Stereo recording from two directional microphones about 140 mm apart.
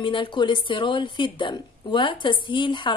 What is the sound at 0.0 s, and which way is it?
A woman's voice, 35° left (ahead or behind).